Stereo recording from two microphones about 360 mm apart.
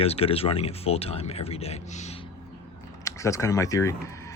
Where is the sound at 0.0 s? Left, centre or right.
Centre.